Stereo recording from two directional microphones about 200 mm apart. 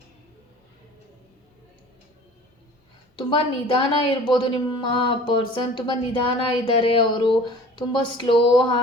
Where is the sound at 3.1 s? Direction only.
25° left (ahead or behind).